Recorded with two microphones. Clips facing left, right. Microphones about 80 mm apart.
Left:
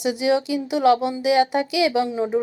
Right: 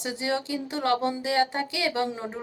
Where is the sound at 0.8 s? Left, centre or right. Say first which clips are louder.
Left 7 dB; right.